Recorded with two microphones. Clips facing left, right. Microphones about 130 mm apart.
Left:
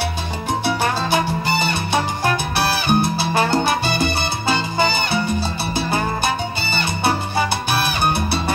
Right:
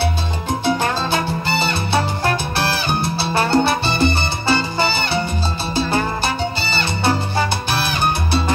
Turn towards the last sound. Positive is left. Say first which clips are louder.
# even
turn(degrees=15)  # may be behind; listen again after turning